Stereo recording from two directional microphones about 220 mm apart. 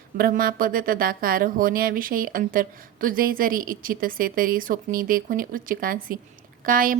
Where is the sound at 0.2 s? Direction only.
40° right (ahead or behind).